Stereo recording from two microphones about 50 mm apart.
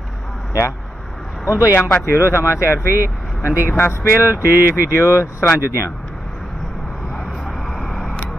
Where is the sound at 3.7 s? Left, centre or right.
Left.